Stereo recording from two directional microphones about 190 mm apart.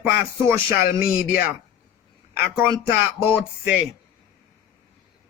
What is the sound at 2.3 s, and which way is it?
Speech, 15° right (ahead or behind).